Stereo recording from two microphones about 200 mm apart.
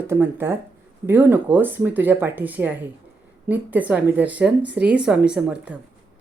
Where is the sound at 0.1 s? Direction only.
10° right (ahead or behind).